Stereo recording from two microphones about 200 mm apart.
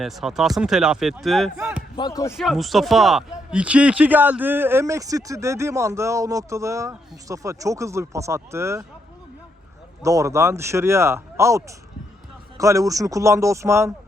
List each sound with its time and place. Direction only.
0.0 s speech: centre (ahead or behind)
2.0 s speech: 20° left (ahead or behind)
2.3 s a man's voice: centre (ahead or behind)
10.0 s a man's voice: 15° right (ahead or behind)